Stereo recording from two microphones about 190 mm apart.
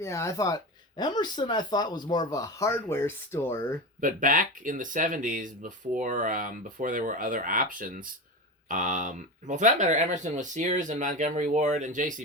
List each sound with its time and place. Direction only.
0.0 s speech: 15° left (ahead or behind)
4.0 s speech: 45° right (ahead or behind)